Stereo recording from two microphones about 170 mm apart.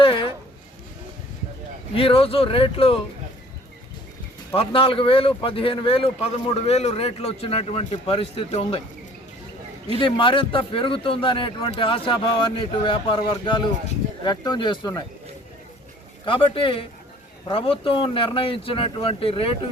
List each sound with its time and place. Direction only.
0.0 s a sound: 30° left (ahead or behind)
2.0 s speech: 35° left (ahead or behind)
4.5 s speech: 35° left (ahead or behind)
10.0 s speech: 30° left (ahead or behind)
16.2 s speech: 30° left (ahead or behind)